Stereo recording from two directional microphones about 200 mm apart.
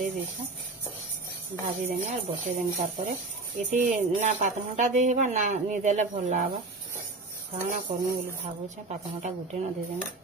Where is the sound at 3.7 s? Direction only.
35° right (ahead or behind).